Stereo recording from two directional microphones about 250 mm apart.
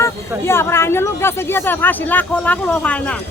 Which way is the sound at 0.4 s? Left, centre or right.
Centre.